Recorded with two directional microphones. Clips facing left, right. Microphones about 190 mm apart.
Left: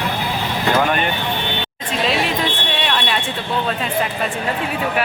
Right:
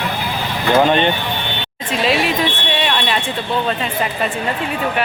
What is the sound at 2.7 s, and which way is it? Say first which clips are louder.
Fire alarm: right 3 dB; centre (ahead or behind).